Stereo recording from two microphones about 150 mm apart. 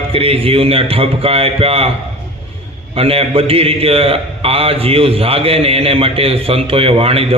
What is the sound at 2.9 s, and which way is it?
A man's voice, 40° right (ahead or behind).